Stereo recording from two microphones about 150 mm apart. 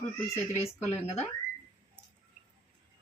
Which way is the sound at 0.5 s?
20° left (ahead or behind).